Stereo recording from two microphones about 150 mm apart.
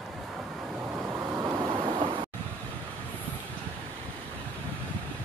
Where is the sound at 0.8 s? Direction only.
15° right (ahead or behind).